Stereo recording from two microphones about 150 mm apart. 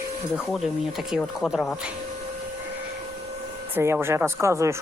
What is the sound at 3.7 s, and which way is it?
Speech, 15° right (ahead or behind).